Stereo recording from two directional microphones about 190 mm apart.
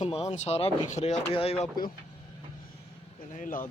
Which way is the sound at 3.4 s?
45° left (ahead or behind).